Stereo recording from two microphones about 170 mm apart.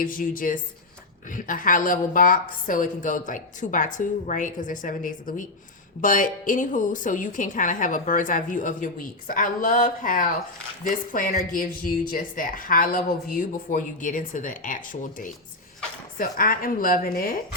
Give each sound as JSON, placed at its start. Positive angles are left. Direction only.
{"t": 0.0, "sound": "a woman's voice", "side_deg": 55}
{"t": 16.1, "sound": "a woman's voice", "side_deg": 55}